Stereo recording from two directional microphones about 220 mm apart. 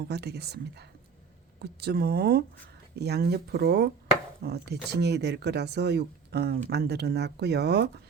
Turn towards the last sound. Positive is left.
turn(degrees=-50)  # may be behind; listen again after turning